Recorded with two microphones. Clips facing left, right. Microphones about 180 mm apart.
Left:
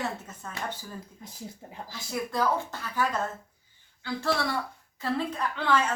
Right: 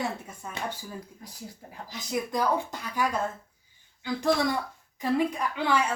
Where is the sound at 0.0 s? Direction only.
10° right (ahead or behind).